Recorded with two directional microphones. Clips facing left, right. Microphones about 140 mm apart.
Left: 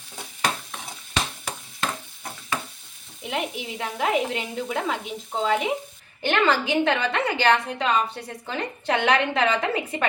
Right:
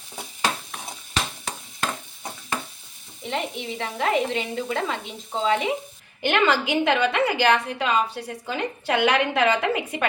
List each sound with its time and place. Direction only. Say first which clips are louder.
3.2 s a woman's voice: right 1 dB; 5° left (ahead or behind)
6.2 s a woman's voice: right 1 dB; 10° right (ahead or behind)